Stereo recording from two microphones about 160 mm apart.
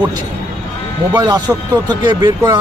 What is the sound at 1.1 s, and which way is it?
Speech, 25° right (ahead or behind).